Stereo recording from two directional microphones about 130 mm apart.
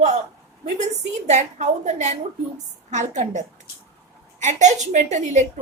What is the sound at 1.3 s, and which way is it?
A woman's voice, 65° right (ahead or behind).